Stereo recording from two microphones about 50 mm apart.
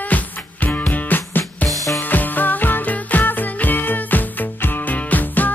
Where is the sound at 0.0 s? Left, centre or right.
Left.